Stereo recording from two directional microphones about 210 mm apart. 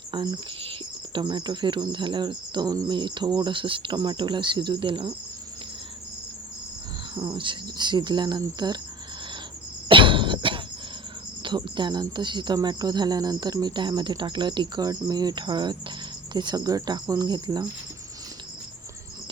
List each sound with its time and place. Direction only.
0.1 s speech: 20° right (ahead or behind)
7.1 s speech: 25° right (ahead or behind)
9.9 s cough: 25° right (ahead or behind)
11.4 s speech: 20° right (ahead or behind)